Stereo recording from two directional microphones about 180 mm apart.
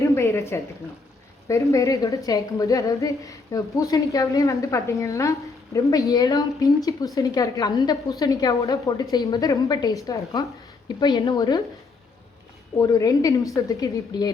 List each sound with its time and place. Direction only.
0.0 s speech: 15° left (ahead or behind)
1.7 s a woman's voice: 20° left (ahead or behind)
12.8 s a woman's voice: 20° left (ahead or behind)